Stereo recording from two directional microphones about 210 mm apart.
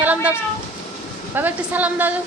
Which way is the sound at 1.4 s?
10° right (ahead or behind).